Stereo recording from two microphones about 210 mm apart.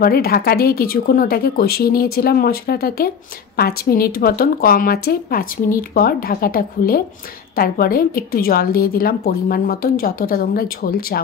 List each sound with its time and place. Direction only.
0.0 s a woman's voice: 45° left (ahead or behind)